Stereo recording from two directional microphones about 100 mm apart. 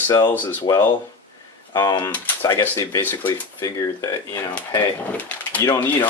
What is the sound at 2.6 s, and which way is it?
Speech, 35° left (ahead or behind).